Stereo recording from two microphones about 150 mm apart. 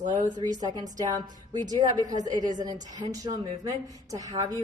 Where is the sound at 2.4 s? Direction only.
25° right (ahead or behind).